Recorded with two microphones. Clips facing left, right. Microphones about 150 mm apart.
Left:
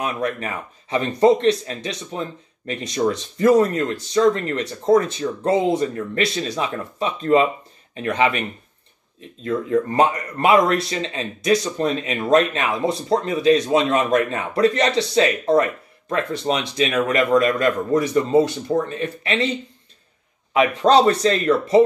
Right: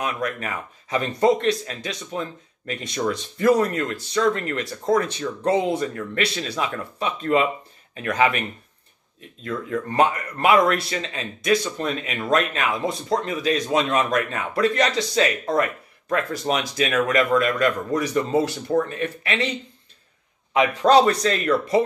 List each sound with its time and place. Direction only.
0.0 s speech: 30° left (ahead or behind)
9.4 s speech: 35° left (ahead or behind)
20.8 s speech: 30° left (ahead or behind)